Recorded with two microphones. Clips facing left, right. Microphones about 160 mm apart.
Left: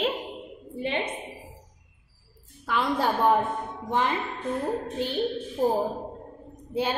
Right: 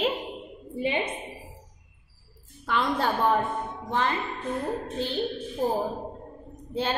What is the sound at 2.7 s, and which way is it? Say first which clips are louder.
A woman's voice: left 1 dB; 10° left (ahead or behind).